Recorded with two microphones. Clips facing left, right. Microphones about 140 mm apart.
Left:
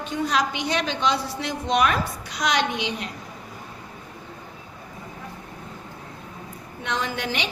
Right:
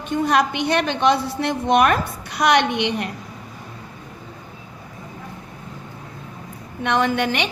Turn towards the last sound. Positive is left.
turn(degrees=-60)  # may be behind; listen again after turning